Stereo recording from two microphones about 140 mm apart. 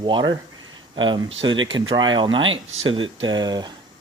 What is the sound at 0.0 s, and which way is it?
Speech, 30° right (ahead or behind).